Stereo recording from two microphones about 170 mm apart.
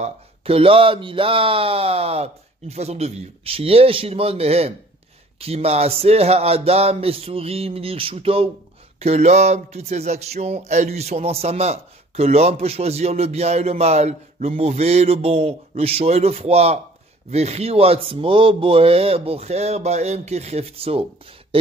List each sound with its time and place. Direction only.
0.0 s speech: 35° right (ahead or behind)